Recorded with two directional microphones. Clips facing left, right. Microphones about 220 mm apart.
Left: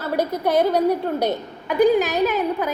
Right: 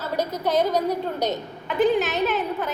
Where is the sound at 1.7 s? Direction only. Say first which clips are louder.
Left 4 dB; 40° left (ahead or behind).